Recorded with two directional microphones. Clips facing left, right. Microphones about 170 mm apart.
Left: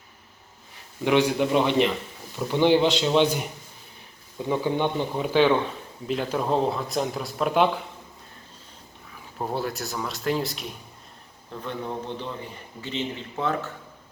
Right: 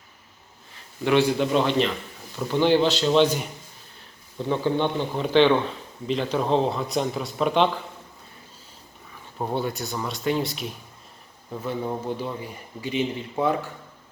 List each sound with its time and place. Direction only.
1.0 s speech: 15° left (ahead or behind)
4.4 s speech: 10° left (ahead or behind)
9.4 s speech: centre (ahead or behind)